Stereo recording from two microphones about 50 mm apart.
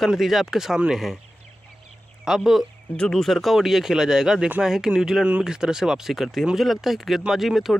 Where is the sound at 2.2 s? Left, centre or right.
Centre.